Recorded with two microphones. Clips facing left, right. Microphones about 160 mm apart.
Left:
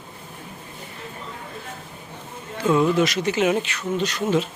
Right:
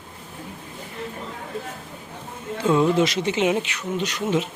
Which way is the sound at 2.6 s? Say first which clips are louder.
Even; 25° right (ahead or behind).